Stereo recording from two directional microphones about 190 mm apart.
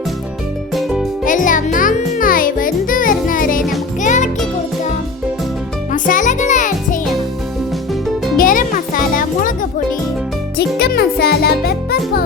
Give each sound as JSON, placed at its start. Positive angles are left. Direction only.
{"t": 0.7, "sound": "music", "side_deg": 0}
{"t": 1.2, "sound": "music", "side_deg": 45}
{"t": 5.9, "sound": "music", "side_deg": 45}
{"t": 8.4, "sound": "music", "side_deg": 45}
{"t": 10.8, "sound": "music", "side_deg": 55}